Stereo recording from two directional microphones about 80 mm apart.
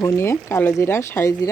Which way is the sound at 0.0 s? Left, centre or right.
Left.